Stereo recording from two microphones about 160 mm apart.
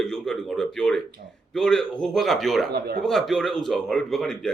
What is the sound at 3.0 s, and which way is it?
Speech, centre (ahead or behind).